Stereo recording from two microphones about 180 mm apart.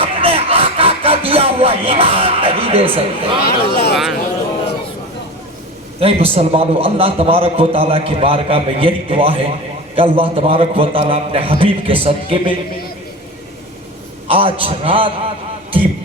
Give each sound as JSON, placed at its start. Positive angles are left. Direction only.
{"t": 0.0, "sound": "a sound", "side_deg": -30}
{"t": 6.0, "sound": "a man's voice", "side_deg": -30}
{"t": 14.3, "sound": "a man's voice", "side_deg": -30}